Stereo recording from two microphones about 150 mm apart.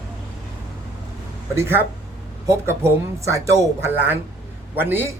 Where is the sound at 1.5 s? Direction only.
15° right (ahead or behind).